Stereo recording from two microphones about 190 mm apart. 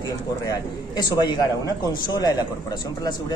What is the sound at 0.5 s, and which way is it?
A man's voice, 20° left (ahead or behind).